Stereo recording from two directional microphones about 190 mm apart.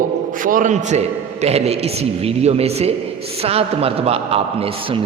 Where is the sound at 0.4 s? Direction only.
45° right (ahead or behind).